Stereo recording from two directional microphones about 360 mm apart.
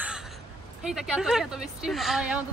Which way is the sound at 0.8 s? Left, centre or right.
Centre.